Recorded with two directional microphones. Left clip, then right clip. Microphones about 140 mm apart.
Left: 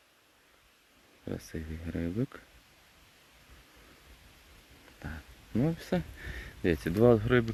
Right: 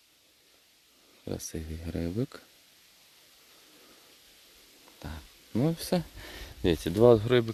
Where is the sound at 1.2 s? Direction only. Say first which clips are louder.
Right 3 dB; 30° right (ahead or behind).